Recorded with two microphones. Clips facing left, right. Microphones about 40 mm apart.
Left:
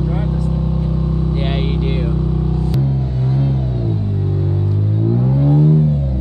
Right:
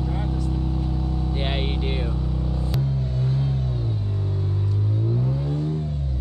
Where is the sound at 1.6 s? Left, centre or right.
Left.